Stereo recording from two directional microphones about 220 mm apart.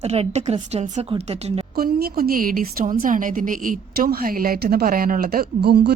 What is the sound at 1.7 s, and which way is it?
A woman's voice, 45° right (ahead or behind).